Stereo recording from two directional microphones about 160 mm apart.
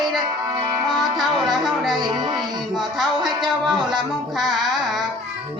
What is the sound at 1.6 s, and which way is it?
Music, centre (ahead or behind).